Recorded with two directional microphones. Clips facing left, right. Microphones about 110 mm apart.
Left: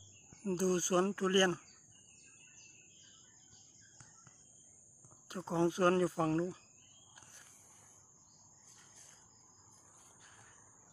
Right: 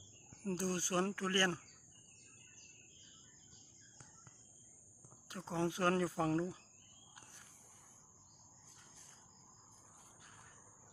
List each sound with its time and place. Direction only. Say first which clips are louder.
0.4 s speech: left 6 dB; 5° left (ahead or behind)
5.3 s speech: left 5 dB; 5° left (ahead or behind)